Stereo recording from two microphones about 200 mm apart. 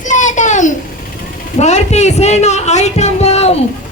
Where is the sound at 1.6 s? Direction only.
35° left (ahead or behind).